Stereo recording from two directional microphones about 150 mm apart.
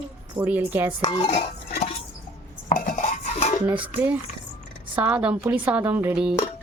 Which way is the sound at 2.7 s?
60° left (ahead or behind).